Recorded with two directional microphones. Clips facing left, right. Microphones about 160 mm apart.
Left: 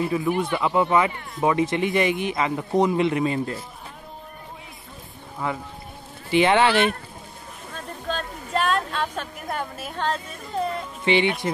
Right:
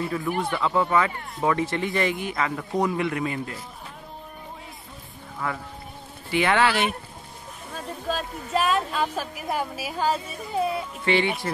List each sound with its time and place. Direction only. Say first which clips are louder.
0.0 s speech: left 3 dB; 20° left (ahead or behind)
5.4 s speech: left 2 dB; 20° left (ahead or behind)
7.7 s speech: right 1 dB; 5° right (ahead or behind)
11.1 s speech: left 2 dB; 20° left (ahead or behind)